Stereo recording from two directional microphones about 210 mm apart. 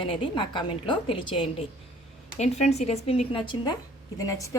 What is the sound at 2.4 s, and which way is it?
A woman's voice, 30° left (ahead or behind).